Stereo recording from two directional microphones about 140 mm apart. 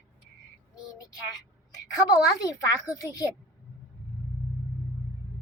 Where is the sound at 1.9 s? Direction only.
25° left (ahead or behind).